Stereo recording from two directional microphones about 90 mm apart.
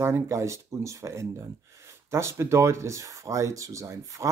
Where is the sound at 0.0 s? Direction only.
30° right (ahead or behind).